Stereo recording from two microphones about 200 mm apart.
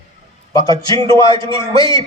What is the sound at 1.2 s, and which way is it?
Speech, 25° right (ahead or behind).